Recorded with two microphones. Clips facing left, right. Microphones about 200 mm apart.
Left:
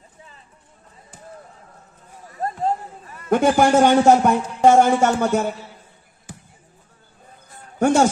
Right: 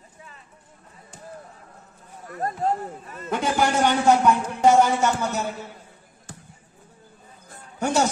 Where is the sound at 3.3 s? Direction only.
50° left (ahead or behind).